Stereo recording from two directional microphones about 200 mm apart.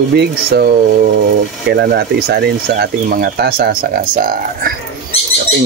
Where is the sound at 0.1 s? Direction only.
55° right (ahead or behind).